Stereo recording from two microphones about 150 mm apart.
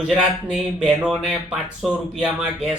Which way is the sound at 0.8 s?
5° right (ahead or behind).